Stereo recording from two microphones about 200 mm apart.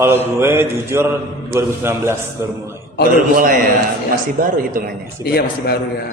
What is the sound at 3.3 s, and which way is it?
Speech, 40° right (ahead or behind).